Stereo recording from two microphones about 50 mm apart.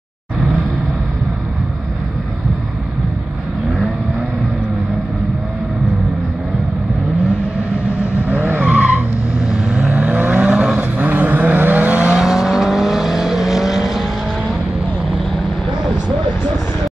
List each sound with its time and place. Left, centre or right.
8.3 s vehicle: right; by 10.8 s centre
10.8 s vehicle: right
12.2 s vehicle: centre